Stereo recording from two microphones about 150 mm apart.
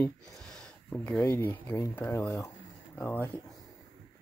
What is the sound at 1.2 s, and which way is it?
Speech, 15° left (ahead or behind).